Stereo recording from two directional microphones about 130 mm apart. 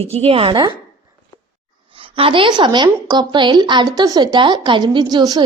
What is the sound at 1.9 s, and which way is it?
A woman's voice, 45° right (ahead or behind).